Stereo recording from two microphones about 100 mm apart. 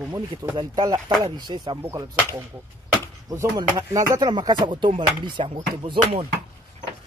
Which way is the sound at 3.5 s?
35° right (ahead or behind).